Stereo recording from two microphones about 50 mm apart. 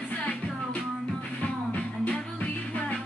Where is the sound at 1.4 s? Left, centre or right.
Left.